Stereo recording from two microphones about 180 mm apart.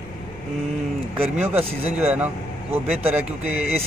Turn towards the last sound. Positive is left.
turn(degrees=-10)  # may be behind; listen again after turning